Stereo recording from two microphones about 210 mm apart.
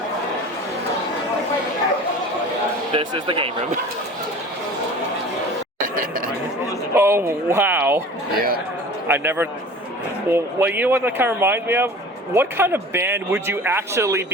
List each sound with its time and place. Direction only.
2.9 s speech: 20° right (ahead or behind)
5.8 s a sound: 40° right (ahead or behind)
6.9 s speech: 10° right (ahead or behind)
8.3 s speech: 45° right (ahead or behind)
9.0 s speech: 10° right (ahead or behind)